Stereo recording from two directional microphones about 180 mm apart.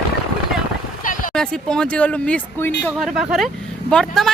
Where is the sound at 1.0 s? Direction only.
50° left (ahead or behind).